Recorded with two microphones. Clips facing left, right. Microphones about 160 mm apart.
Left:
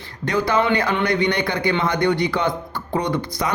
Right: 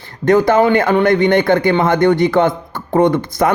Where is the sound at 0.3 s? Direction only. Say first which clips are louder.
Right 8 dB; 50° right (ahead or behind).